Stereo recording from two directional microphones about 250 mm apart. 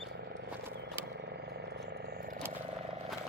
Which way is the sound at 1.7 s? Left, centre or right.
Right.